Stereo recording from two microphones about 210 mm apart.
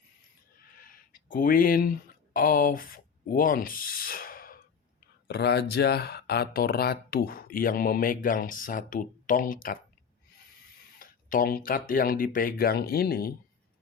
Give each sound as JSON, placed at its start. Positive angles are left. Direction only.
{"t": 0.9, "sound": "speech", "side_deg": 40}
{"t": 10.9, "sound": "speech", "side_deg": 40}